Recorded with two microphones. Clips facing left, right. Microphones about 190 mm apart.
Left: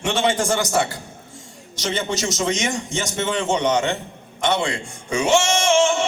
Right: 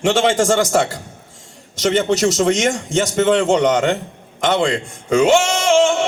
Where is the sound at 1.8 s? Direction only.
65° right (ahead or behind).